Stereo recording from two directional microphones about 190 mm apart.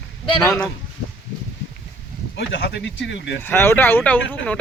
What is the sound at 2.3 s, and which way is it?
Speech, 70° left (ahead or behind).